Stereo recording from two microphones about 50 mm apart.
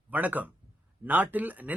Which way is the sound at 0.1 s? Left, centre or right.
Right.